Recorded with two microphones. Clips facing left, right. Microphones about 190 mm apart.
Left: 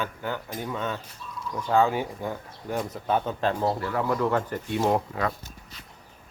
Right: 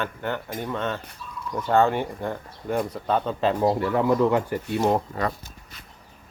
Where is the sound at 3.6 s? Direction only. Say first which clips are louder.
Right 5 dB; 25° right (ahead or behind).